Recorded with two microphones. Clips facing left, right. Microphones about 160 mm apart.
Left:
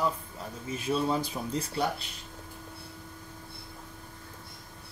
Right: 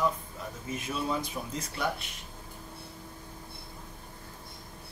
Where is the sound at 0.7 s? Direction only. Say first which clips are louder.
Left 4 dB; 30° left (ahead or behind).